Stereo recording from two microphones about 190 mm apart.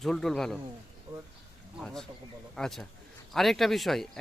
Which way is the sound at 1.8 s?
Centre (ahead or behind).